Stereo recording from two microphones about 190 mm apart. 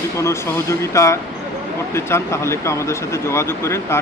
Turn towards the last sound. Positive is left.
turn(degrees=15)  # may be behind; listen again after turning